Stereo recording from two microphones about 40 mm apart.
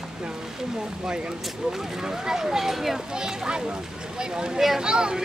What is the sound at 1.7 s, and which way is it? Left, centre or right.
Speech, centre.